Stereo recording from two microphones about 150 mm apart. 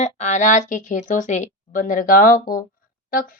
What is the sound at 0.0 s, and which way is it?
A woman's voice, 50° left (ahead or behind).